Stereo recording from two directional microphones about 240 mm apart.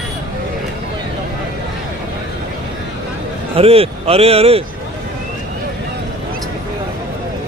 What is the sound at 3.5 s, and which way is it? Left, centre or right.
Speech, right.